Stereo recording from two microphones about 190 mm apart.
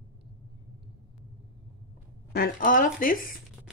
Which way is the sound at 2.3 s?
50° left (ahead or behind).